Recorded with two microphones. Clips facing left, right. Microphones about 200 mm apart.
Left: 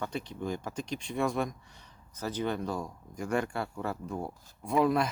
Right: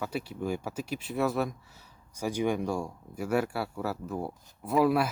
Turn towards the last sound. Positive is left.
turn(degrees=-5)  # may be behind; listen again after turning